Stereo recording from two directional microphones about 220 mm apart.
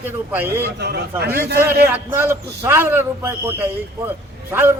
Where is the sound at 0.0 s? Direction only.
10° right (ahead or behind).